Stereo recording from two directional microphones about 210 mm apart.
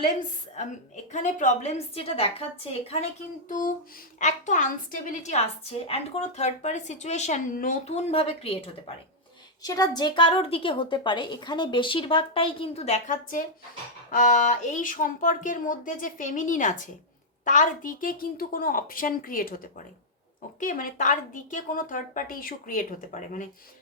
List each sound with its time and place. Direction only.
1.1 s a woman's voice: 35° left (ahead or behind)
3.5 s a woman's voice: 40° left (ahead or behind)